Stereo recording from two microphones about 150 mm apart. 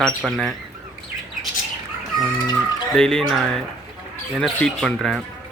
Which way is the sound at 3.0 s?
5° left (ahead or behind).